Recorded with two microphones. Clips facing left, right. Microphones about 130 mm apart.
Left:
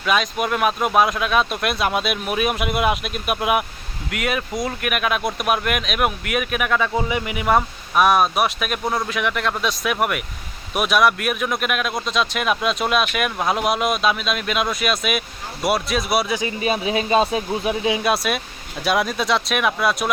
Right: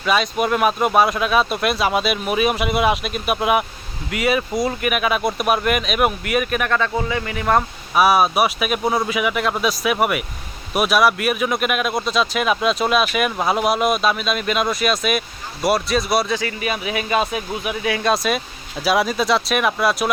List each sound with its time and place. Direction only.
0.0 s speech: centre (ahead or behind)
7.9 s speech: 5° right (ahead or behind)
16.3 s speech: 15° left (ahead or behind)
16.6 s speech: 30° left (ahead or behind)
18.0 s speech: 5° left (ahead or behind)